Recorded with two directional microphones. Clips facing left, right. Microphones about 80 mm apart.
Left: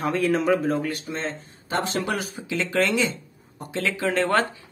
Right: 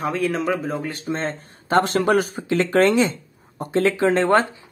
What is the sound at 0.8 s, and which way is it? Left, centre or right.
Speech, right.